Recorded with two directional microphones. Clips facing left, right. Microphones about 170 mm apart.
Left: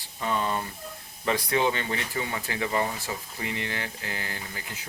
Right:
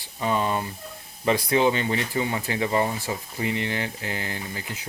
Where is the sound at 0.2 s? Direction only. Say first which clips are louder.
Right 4 dB; 15° right (ahead or behind).